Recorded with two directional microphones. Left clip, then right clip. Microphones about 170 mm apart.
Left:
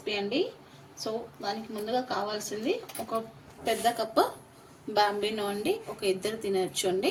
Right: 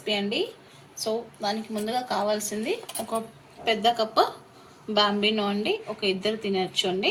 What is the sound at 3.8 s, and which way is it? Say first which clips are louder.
A woman's voice: right 4 dB; 75° left (ahead or behind).